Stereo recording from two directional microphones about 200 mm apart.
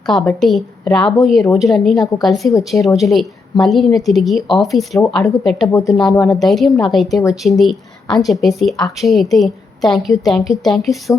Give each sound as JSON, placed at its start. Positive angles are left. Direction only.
{"t": 0.0, "sound": "a woman's voice", "side_deg": 5}
{"t": 2.5, "sound": "a woman's voice", "side_deg": 15}
{"t": 2.8, "sound": "a woman's voice", "side_deg": 0}
{"t": 5.0, "sound": "a woman's voice", "side_deg": 10}
{"t": 5.4, "sound": "a woman's voice", "side_deg": 0}
{"t": 5.7, "sound": "a woman's voice", "side_deg": 15}
{"t": 6.4, "sound": "a woman's voice", "side_deg": 0}